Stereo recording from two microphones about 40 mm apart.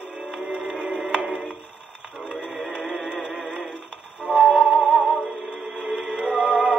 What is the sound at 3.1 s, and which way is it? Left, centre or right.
Music, right.